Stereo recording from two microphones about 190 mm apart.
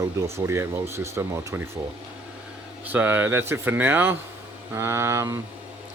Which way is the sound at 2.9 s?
10° right (ahead or behind).